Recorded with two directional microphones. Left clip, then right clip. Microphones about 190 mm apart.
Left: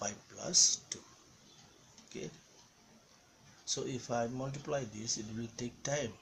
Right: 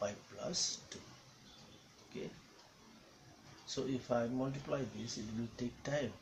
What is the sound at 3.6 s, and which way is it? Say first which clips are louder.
Speech: left 1 dB; 50° left (ahead or behind).